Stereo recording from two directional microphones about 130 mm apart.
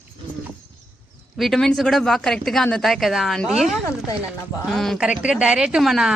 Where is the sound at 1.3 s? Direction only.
Centre (ahead or behind).